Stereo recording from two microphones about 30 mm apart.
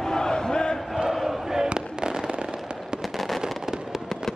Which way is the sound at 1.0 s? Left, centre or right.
Centre.